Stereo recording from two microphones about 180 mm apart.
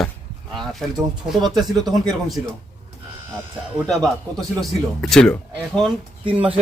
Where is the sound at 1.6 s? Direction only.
Centre (ahead or behind).